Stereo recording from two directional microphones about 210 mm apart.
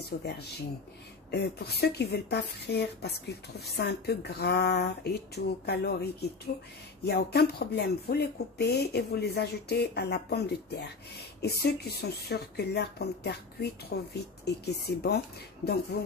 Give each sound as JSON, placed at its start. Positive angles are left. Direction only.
{"t": 0.1, "sound": "a woman's voice", "side_deg": 50}
{"t": 1.3, "sound": "a woman's voice", "side_deg": 50}
{"t": 7.1, "sound": "a woman's voice", "side_deg": 50}